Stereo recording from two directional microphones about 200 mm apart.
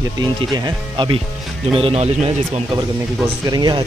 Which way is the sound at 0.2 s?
20° right (ahead or behind).